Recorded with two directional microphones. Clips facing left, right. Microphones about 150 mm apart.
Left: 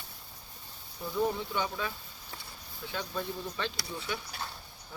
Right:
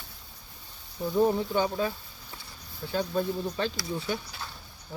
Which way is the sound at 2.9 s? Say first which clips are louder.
Right 8 dB; 35° right (ahead or behind).